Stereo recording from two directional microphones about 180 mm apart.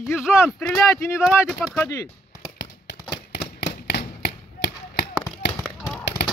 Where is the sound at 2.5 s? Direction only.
70° left (ahead or behind).